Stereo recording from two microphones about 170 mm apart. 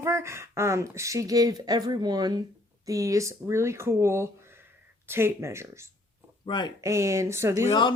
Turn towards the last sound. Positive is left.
turn(degrees=-15)  # may be behind; listen again after turning